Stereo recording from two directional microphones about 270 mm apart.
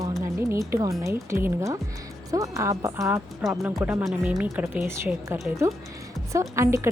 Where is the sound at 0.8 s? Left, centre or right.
Centre.